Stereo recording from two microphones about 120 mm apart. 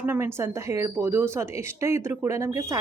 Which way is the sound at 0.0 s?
20° right (ahead or behind).